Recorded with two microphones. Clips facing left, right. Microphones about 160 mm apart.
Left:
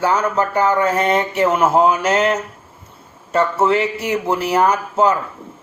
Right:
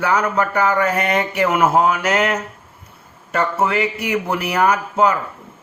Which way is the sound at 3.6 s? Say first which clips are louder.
Left 3 dB; 25° left (ahead or behind).